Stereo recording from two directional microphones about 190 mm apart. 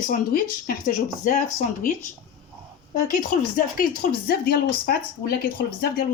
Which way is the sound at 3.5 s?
45° left (ahead or behind).